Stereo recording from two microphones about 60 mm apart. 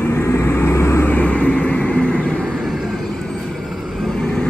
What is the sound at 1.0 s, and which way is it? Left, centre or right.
Vehicle, left.